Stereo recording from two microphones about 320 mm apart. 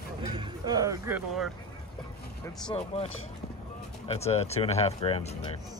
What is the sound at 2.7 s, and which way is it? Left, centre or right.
Speech, centre.